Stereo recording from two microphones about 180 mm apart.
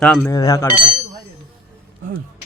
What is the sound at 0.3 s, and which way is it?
Speech, 20° left (ahead or behind).